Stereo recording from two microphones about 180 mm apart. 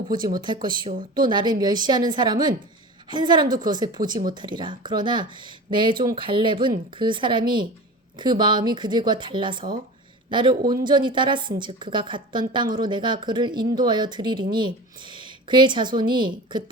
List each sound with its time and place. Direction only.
0.3 s speech: 25° right (ahead or behind)